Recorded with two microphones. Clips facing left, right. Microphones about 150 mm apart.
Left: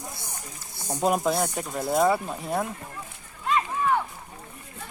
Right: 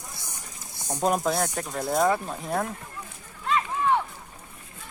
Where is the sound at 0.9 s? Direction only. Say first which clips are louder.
Left 1 dB; 5° left (ahead or behind).